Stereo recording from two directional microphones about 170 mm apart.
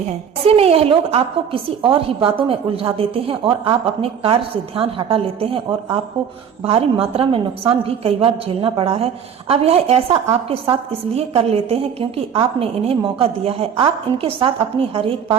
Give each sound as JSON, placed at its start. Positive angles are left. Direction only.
{"t": 0.4, "sound": "a woman's voice", "side_deg": -35}
{"t": 6.6, "sound": "a woman's voice", "side_deg": -35}